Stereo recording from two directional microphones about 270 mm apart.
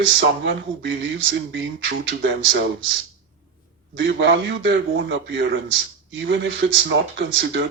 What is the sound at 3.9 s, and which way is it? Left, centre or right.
Speech, right.